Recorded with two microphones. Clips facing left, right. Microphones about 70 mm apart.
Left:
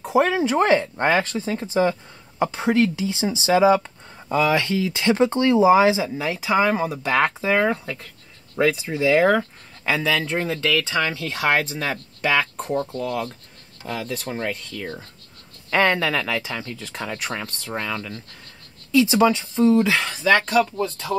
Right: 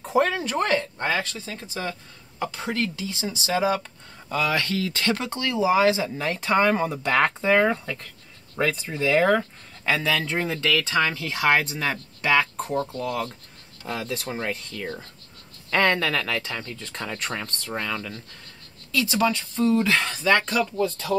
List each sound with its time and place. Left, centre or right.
0.0 s speech: centre
0.9 s speech: left
6.0 s speech: centre
15.7 s speech: centre
18.9 s speech: centre
19.9 s speech: centre